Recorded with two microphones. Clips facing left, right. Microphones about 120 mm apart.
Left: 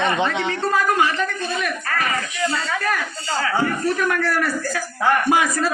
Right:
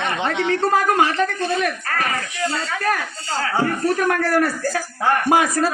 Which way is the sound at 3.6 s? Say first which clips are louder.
Right 2 dB; 45° right (ahead or behind).